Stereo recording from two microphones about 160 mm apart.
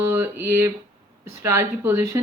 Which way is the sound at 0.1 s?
15° right (ahead or behind).